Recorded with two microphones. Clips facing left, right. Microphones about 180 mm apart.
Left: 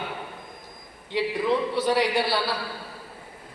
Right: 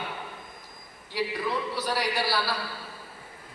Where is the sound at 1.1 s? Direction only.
20° left (ahead or behind).